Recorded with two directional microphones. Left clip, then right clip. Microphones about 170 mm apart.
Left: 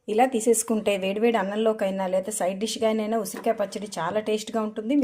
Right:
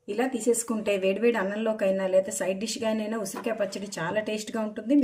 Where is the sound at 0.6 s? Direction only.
40° left (ahead or behind).